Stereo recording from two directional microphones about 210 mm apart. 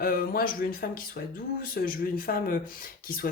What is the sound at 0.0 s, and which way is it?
Speech, 45° left (ahead or behind).